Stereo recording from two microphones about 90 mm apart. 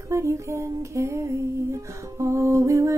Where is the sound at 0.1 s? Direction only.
30° right (ahead or behind).